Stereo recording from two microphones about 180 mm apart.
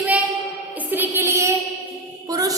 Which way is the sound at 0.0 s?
10° right (ahead or behind).